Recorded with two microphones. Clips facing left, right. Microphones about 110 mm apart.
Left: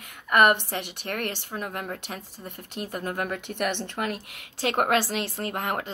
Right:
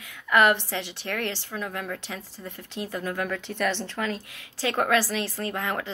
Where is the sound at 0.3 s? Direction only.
55° left (ahead or behind).